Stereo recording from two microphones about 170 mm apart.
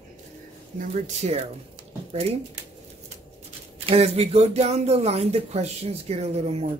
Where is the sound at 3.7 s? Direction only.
35° right (ahead or behind).